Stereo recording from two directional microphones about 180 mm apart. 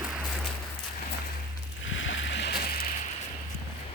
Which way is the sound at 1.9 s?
90° left.